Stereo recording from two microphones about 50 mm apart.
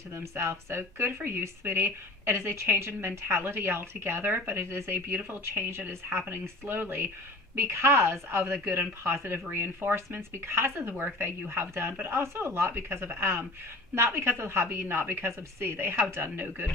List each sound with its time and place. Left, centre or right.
0.1 s speech: right
10.9 s speech: right
12.2 s speech: right